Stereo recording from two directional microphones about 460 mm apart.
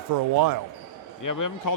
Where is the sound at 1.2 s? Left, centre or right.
Left.